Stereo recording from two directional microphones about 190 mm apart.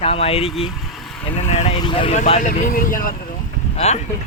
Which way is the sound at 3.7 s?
35° left (ahead or behind).